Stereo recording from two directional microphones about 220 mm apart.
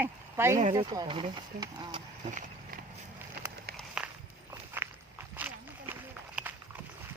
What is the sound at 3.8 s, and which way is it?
Walk, 5° right (ahead or behind).